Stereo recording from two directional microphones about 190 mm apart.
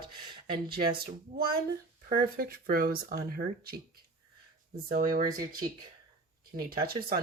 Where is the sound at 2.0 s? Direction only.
50° right (ahead or behind).